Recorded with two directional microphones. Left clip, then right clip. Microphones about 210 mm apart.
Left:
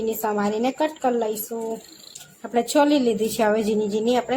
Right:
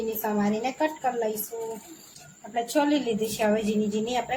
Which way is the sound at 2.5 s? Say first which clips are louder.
Left 6 dB; 45° left (ahead or behind).